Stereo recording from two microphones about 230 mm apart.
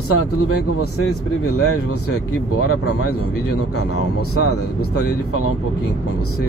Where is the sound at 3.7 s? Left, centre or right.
Left.